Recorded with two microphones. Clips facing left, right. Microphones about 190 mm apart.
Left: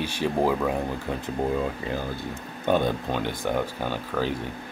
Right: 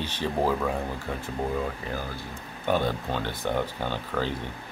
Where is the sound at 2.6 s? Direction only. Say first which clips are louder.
Left 3 dB; 15° left (ahead or behind).